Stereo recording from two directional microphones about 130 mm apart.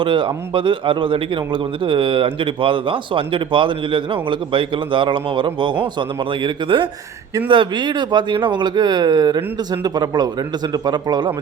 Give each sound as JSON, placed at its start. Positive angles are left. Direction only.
{"t": 0.0, "sound": "speech", "side_deg": -40}